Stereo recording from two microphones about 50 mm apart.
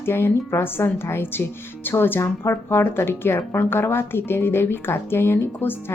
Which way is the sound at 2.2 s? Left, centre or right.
Left.